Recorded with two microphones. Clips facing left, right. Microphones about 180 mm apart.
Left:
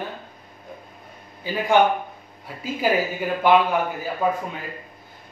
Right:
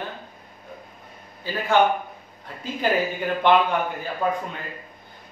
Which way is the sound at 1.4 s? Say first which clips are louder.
Left 2 dB; 15° left (ahead or behind).